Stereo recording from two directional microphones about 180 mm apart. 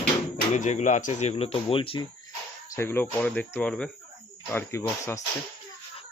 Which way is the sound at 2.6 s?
15° left (ahead or behind).